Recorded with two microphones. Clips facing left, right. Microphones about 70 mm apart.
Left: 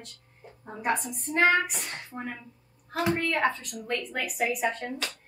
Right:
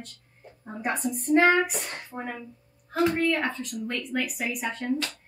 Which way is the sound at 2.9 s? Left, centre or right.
Centre.